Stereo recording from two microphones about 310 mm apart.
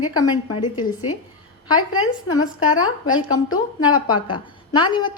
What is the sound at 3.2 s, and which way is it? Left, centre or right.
A woman's voice, centre.